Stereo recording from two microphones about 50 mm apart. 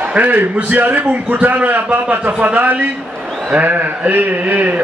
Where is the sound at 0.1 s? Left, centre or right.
Right.